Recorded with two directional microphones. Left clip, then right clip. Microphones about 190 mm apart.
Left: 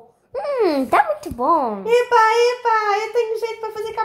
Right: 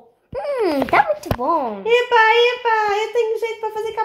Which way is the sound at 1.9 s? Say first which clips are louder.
Right 1 dB; 20° right (ahead or behind).